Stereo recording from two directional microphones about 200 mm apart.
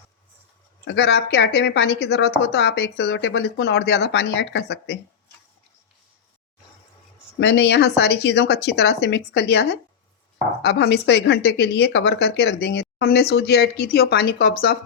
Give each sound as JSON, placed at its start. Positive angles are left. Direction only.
{"t": 0.9, "sound": "a woman's voice", "side_deg": 55}
{"t": 7.3, "sound": "a woman's voice", "side_deg": 55}